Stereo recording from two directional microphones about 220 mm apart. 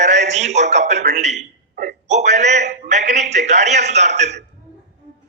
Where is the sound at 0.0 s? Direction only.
30° right (ahead or behind).